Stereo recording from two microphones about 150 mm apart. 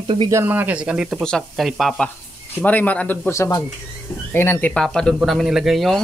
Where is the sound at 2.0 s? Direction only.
10° left (ahead or behind).